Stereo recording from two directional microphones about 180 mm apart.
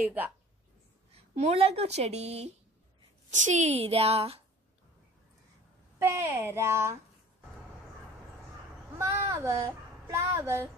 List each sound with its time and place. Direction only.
0.0 s speech: 10° right (ahead or behind)
1.1 s a woman's voice: 35° right (ahead or behind)
5.9 s speech: 15° right (ahead or behind)
8.9 s speech: 15° right (ahead or behind)